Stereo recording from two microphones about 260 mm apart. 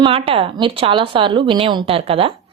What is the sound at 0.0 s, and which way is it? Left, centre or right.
A woman's voice, right.